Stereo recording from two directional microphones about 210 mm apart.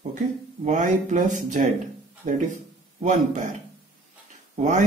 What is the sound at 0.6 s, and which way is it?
Speech, 35° right (ahead or behind).